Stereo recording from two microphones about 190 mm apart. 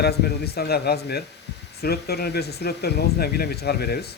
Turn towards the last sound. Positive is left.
turn(degrees=55)  # may be behind; listen again after turning